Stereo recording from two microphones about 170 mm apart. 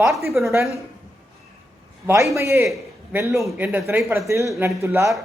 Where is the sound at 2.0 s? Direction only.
15° right (ahead or behind).